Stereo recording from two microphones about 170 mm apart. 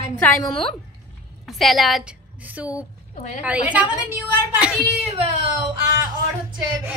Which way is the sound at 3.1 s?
45° left (ahead or behind).